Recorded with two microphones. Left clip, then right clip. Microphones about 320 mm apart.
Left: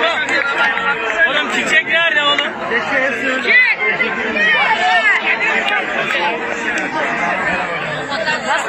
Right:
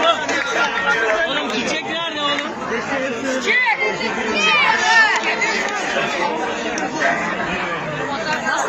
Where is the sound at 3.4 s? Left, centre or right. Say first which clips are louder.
Left 5 dB; centre.